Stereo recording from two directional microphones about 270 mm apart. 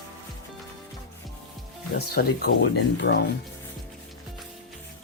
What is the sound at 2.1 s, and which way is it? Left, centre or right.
Speech, left.